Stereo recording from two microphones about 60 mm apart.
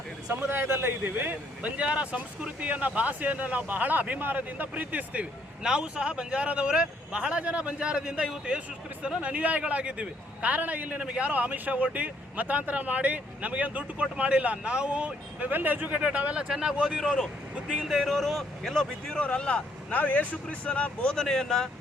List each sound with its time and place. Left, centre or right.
0.4 s a man's voice: right
1.7 s speech: centre
5.6 s speech: centre
16.5 s speech: centre
17.0 s speech: centre
17.7 s speech: centre
19.2 s speech: centre
19.9 s speech: left; by 21.7 s centre